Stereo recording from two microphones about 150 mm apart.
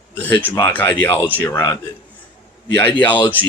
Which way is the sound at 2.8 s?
10° left (ahead or behind).